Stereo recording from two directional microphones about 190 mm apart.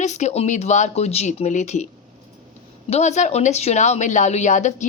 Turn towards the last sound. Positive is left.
turn(degrees=40)  # may be behind; listen again after turning